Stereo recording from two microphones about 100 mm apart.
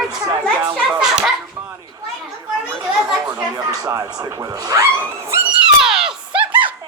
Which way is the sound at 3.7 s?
40° right (ahead or behind).